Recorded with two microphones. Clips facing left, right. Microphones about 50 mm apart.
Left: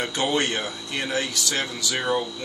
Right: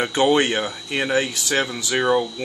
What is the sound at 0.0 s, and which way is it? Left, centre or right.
Speech, right.